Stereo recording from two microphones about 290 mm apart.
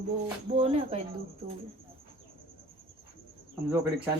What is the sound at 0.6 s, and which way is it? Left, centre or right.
Speech, right.